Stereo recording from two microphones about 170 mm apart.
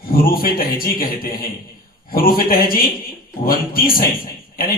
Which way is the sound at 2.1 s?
60° left (ahead or behind).